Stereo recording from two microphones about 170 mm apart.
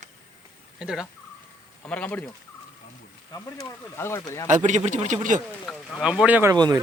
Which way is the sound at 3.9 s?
15° left (ahead or behind).